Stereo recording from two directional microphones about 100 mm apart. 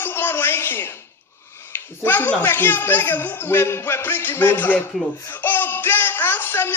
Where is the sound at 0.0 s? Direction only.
25° left (ahead or behind).